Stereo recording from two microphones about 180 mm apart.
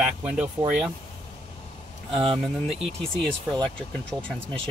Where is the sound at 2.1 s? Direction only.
30° right (ahead or behind).